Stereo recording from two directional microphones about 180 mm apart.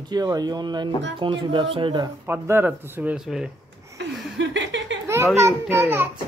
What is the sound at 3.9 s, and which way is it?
Chuckle, 90° right.